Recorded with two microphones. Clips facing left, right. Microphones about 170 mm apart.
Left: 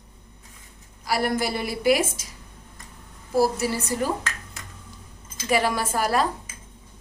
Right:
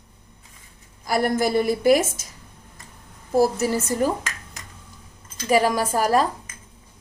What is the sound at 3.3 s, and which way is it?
Speech, 45° right (ahead or behind).